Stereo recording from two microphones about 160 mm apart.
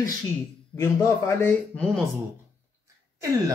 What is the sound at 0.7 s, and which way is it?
Speech, 15° left (ahead or behind).